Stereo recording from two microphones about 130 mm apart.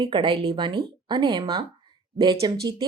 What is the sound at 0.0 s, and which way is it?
Speech, 40° right (ahead or behind).